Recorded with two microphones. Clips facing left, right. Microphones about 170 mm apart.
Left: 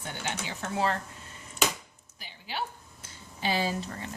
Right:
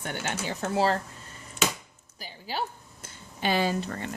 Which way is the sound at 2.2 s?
40° right (ahead or behind).